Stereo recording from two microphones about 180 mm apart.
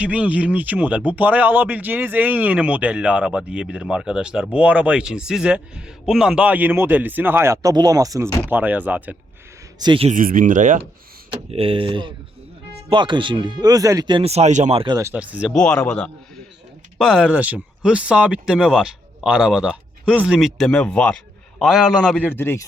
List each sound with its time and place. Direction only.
0.0 s a man's voice: 5° right (ahead or behind)
9.7 s speech: 25° right (ahead or behind)
10.1 s speech: 50° right (ahead or behind)
11.3 s speech: 30° right (ahead or behind)
14.9 s a man's voice: 10° right (ahead or behind)
15.5 s speech: 5° left (ahead or behind)